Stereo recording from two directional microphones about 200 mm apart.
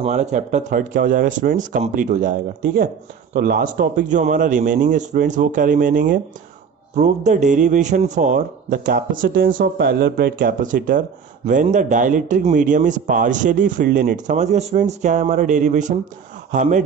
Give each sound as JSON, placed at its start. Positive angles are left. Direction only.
{"t": 0.0, "sound": "a man's voice", "side_deg": -35}